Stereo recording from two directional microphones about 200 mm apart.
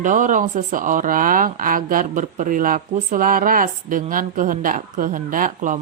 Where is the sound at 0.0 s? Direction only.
40° right (ahead or behind).